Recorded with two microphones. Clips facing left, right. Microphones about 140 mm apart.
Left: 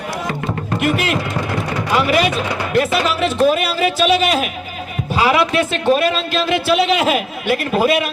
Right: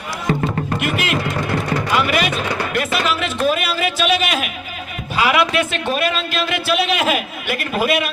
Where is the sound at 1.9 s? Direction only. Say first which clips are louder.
Left 5 dB; 30° left (ahead or behind).